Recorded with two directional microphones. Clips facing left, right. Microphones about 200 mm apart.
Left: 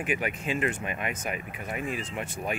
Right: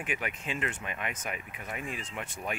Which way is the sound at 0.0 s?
5° left (ahead or behind).